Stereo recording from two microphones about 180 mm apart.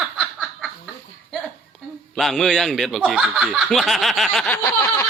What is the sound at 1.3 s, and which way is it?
Speech, centre (ahead or behind).